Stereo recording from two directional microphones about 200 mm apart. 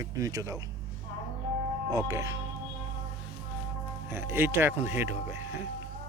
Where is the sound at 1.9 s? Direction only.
15° right (ahead or behind).